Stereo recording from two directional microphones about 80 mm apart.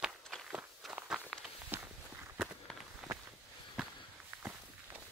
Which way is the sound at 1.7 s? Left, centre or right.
Right.